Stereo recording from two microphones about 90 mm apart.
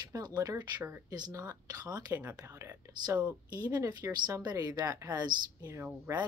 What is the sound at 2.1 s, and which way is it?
Speech, 20° right (ahead or behind).